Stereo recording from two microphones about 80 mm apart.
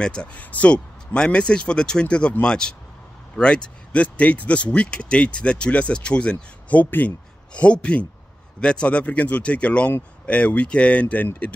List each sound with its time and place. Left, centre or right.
0.0 s speech: centre